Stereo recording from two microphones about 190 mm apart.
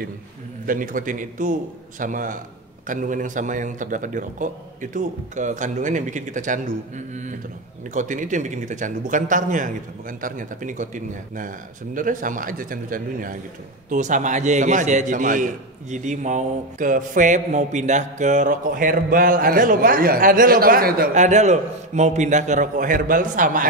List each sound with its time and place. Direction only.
0.7 s a man's voice: 45° right (ahead or behind)